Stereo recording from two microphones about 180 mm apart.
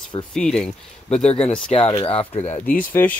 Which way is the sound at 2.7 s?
50° left (ahead or behind).